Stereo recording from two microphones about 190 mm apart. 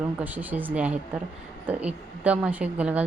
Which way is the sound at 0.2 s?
10° right (ahead or behind).